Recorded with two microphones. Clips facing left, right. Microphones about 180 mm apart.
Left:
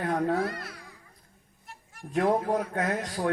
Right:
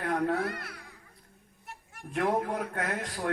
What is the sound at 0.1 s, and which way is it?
Speech, 35° left (ahead or behind).